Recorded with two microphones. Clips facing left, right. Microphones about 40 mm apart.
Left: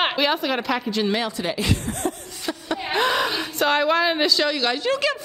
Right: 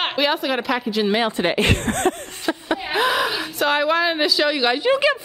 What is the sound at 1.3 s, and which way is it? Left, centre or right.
Speech, right.